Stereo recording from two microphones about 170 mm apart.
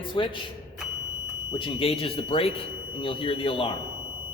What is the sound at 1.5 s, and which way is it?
Speech, 30° left (ahead or behind).